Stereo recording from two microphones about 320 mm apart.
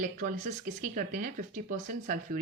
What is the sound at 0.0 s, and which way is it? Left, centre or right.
Speech, right.